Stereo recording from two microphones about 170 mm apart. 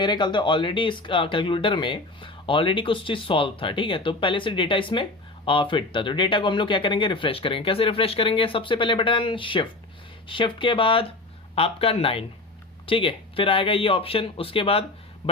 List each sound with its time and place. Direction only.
0.0 s speech: 25° left (ahead or behind)